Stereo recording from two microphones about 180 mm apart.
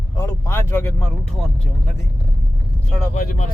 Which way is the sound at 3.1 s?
50° left (ahead or behind).